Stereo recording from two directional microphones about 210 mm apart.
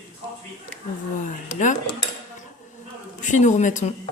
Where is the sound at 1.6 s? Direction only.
35° left (ahead or behind).